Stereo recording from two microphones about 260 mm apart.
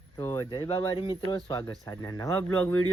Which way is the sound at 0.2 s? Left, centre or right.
Centre.